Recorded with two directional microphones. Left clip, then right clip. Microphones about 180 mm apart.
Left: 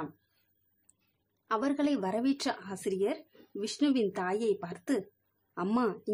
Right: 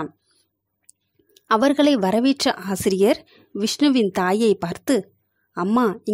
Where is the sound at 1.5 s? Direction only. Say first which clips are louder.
Right 14 dB; 40° right (ahead or behind).